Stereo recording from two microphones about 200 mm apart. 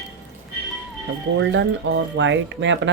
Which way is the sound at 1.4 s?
65° right (ahead or behind).